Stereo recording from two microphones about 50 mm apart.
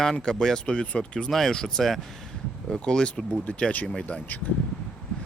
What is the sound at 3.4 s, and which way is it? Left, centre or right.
Speech, left.